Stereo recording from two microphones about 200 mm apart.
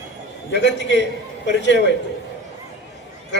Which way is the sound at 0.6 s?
60° left (ahead or behind).